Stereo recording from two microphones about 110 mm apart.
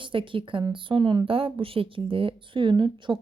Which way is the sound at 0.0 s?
50° right (ahead or behind).